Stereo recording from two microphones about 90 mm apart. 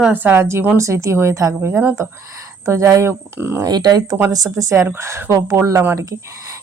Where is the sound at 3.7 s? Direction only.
50° right (ahead or behind).